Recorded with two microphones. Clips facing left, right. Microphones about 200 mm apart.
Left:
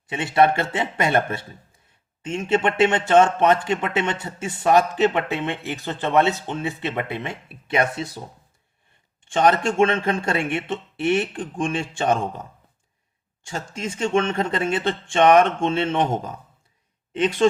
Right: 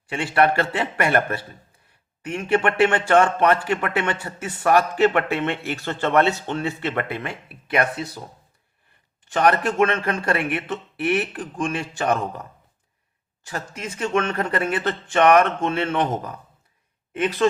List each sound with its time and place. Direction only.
0.1 s a man's voice: 20° left (ahead or behind)
9.2 s a man's voice: 25° left (ahead or behind)